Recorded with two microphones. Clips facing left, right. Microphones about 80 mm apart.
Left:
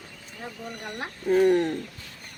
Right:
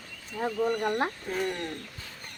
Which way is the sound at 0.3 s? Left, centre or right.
Right.